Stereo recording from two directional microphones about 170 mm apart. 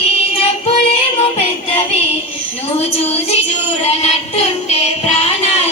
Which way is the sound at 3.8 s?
35° left (ahead or behind).